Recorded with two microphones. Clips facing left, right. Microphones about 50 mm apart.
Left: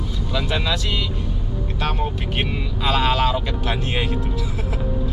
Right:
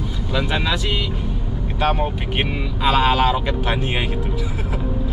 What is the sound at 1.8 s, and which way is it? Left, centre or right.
Speech, centre.